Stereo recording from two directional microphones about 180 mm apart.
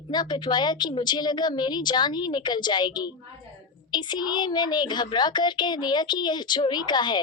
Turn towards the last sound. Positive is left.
turn(degrees=25)  # may be behind; listen again after turning